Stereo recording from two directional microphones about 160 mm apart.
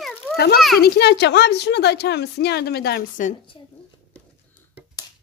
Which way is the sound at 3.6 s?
30° left (ahead or behind).